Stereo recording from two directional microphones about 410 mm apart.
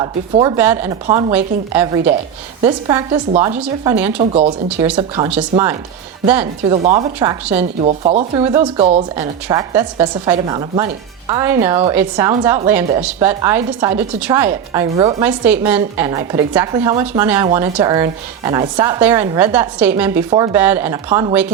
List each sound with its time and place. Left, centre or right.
0.0 s a woman's voice: centre